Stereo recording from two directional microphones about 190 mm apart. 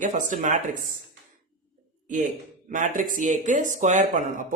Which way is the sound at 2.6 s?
45° right (ahead or behind).